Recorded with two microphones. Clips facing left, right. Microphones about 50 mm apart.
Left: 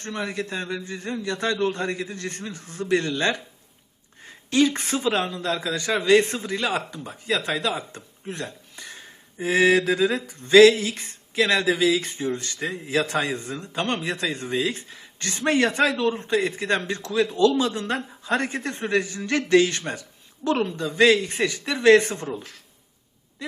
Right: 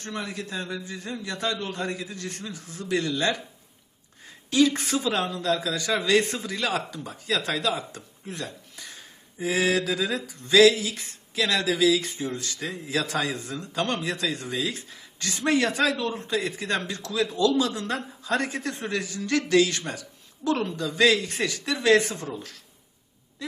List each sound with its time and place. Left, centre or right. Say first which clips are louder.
0.0 s a man's voice: left 4 dB; left
21.8 s a man's voice: left 5 dB; left